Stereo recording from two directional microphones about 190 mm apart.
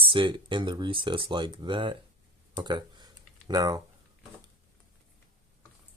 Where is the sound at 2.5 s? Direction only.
25° right (ahead or behind).